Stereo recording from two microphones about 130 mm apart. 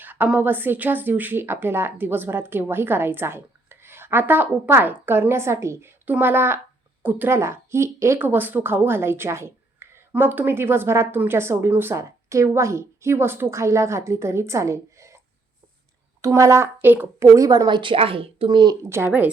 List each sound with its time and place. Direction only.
0.0 s a woman's voice: 15° right (ahead or behind)
16.2 s a woman's voice: 25° right (ahead or behind)
18.9 s a woman's voice: 15° right (ahead or behind)